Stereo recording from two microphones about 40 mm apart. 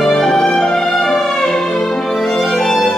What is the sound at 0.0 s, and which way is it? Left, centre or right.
Music, centre.